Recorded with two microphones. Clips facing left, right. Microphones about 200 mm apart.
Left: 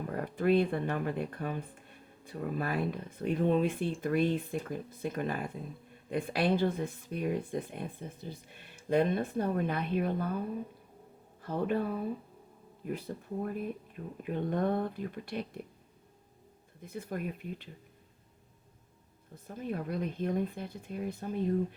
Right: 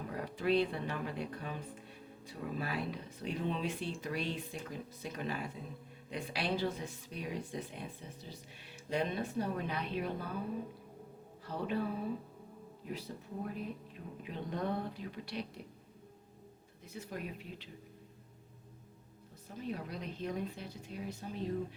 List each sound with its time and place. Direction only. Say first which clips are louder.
0.2 s speech: left 4 dB; 50° left (ahead or behind)
11.4 s speech: left 6 dB; 50° left (ahead or behind)
12.8 s speech: left 6 dB; 55° left (ahead or behind)
16.8 s speech: left 6 dB; 55° left (ahead or behind)
19.5 s speech: left 5 dB; 50° left (ahead or behind)